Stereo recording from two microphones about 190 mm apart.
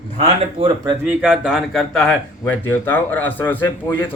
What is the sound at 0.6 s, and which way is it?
Speech, 20° right (ahead or behind).